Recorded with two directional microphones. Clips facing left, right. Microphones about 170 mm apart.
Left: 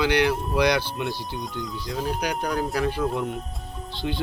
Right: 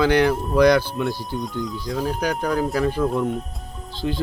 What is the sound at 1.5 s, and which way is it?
Speech, centre (ahead or behind).